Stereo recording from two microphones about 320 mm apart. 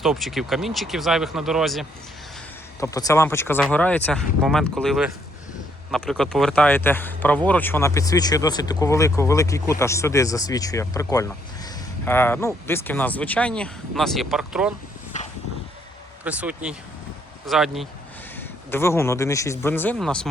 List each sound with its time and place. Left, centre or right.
0.0 s speech: centre
2.8 s speech: centre
15.1 s a sound: left
16.2 s speech: centre